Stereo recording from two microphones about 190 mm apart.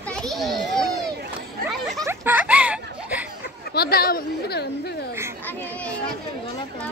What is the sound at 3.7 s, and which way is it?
Speech, 55° left (ahead or behind).